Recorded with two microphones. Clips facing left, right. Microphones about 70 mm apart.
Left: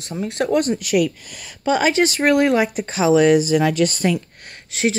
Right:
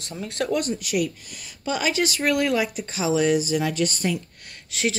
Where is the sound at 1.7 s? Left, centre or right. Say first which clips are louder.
Left 7 dB; left.